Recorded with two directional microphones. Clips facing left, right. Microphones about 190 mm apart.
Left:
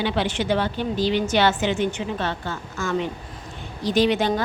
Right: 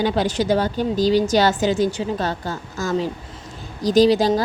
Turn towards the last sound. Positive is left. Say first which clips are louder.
# right 5 dB
turn(degrees=-35)  # may be behind; listen again after turning